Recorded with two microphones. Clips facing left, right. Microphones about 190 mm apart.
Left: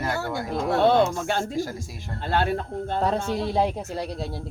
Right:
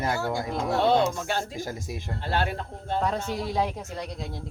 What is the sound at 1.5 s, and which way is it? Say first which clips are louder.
Speech: left 4 dB; 20° right (ahead or behind).